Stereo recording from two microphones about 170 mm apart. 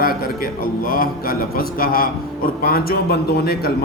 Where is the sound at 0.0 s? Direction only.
60° left (ahead or behind).